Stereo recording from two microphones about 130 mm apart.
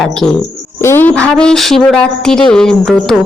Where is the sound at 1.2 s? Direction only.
5° left (ahead or behind).